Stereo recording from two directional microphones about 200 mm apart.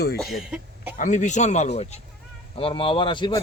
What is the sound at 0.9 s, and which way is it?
A man's voice, 40° left (ahead or behind).